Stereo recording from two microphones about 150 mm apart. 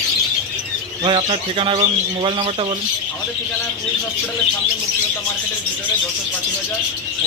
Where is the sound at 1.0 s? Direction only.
35° right (ahead or behind).